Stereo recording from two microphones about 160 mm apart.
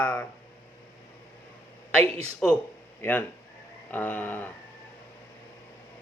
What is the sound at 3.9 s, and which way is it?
Speech, 10° left (ahead or behind).